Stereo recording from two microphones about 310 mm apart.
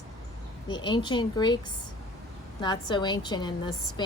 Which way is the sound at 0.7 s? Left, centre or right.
Centre.